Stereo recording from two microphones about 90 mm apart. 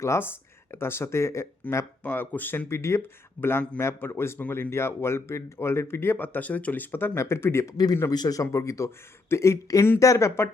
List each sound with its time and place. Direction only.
0.0 s speech: 35° left (ahead or behind)
2.0 s speech: 20° left (ahead or behind)
8.1 s speech: 45° left (ahead or behind)